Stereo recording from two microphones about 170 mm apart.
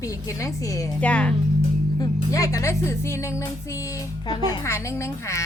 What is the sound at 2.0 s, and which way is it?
Speech, 20° left (ahead or behind).